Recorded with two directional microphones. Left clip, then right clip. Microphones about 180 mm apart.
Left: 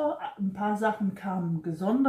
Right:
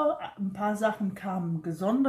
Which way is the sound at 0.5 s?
20° right (ahead or behind).